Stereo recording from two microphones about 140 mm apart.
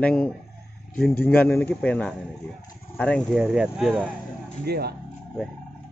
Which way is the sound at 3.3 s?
5° right (ahead or behind).